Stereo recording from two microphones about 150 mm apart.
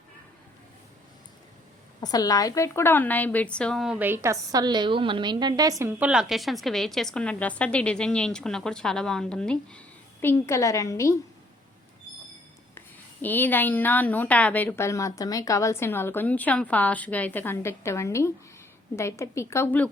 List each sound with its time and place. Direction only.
2.0 s a woman's voice: 25° left (ahead or behind); by 3.9 s 5° left (ahead or behind)
3.9 s a woman's voice: 15° right (ahead or behind)
6.0 s a woman's voice: 5° right (ahead or behind); by 11.2 s 20° left (ahead or behind)
13.2 s a woman's voice: 10° left (ahead or behind)